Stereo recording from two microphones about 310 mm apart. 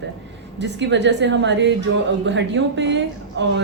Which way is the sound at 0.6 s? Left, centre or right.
Right.